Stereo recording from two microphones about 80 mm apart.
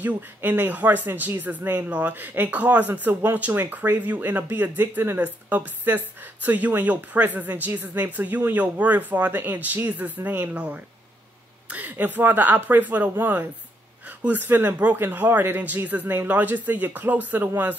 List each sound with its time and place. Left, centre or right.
0.0 s speech: right